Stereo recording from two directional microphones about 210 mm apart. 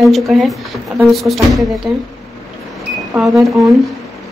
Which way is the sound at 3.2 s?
Centre (ahead or behind).